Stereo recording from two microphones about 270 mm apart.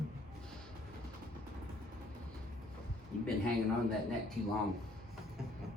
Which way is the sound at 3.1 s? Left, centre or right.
Left.